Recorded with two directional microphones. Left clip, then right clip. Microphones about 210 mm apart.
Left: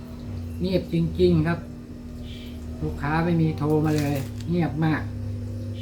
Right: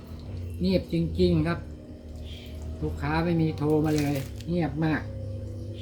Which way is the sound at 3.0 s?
20° right (ahead or behind).